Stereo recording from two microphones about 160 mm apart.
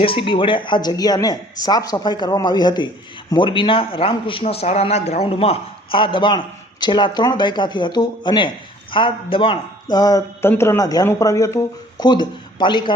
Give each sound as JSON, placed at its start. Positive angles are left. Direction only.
{"t": 0.0, "sound": "speech", "side_deg": 35}
{"t": 9.9, "sound": "speech", "side_deg": 25}